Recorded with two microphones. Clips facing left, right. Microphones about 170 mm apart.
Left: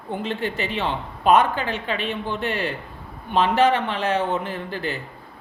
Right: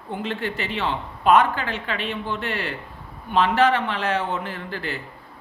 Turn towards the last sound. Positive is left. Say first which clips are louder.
# left 3 dB
turn(degrees=15)  # may be behind; listen again after turning